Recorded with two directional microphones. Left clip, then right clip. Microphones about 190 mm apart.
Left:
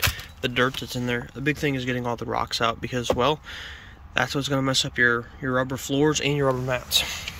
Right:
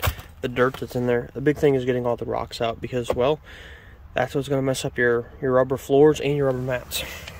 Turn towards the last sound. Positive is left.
turn(degrees=-15)  # may be behind; listen again after turning